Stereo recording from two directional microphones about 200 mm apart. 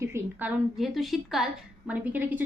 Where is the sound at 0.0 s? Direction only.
10° right (ahead or behind).